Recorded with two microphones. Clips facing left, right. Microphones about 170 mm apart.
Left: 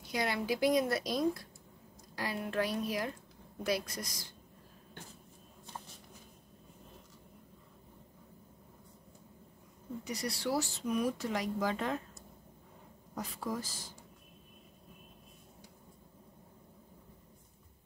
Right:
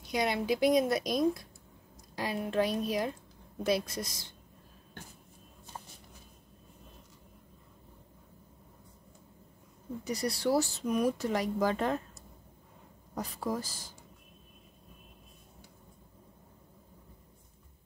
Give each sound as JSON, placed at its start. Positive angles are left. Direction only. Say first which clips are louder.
{"t": 0.0, "sound": "a woman's voice", "louder": "right 4 dB", "side_deg": -20}
{"t": 10.0, "sound": "speech", "louder": "right 6 dB", "side_deg": -35}
{"t": 13.1, "sound": "speech", "louder": "right 4 dB", "side_deg": -40}